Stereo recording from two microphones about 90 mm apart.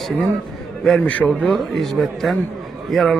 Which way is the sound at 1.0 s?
15° left (ahead or behind).